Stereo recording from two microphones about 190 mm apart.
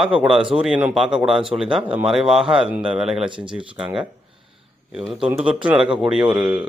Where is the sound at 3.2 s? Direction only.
25° right (ahead or behind).